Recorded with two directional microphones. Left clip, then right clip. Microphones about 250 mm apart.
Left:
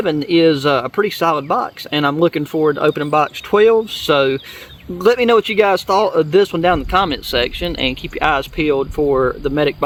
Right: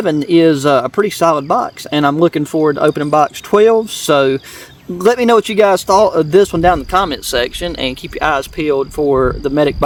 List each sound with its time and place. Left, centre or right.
0.0 s a man's voice: right